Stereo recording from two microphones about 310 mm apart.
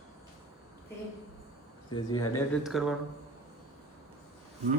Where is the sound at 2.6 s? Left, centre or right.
Centre.